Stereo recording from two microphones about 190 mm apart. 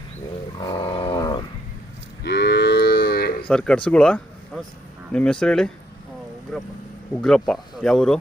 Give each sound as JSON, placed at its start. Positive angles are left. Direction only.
{"t": 0.6, "sound": "wild animals", "side_deg": 20}
{"t": 2.2, "sound": "cattle", "side_deg": 60}
{"t": 3.4, "sound": "speech", "side_deg": 5}
{"t": 7.2, "sound": "speech", "side_deg": 5}